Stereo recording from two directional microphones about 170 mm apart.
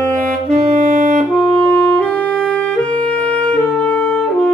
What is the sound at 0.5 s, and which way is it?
Saxophone, 45° right (ahead or behind).